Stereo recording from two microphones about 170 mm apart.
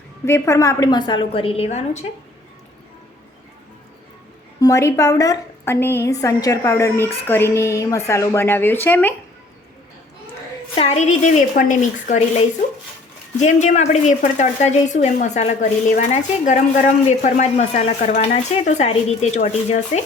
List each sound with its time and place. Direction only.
0.3 s a woman's voice: 15° left (ahead or behind); by 2.0 s 40° left (ahead or behind)
4.6 s a woman's voice: 15° left (ahead or behind)
10.8 s a woman's voice: 40° left (ahead or behind)
13.4 s a woman's voice: 45° left (ahead or behind)